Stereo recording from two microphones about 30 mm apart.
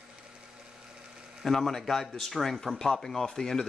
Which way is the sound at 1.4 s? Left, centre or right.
Centre.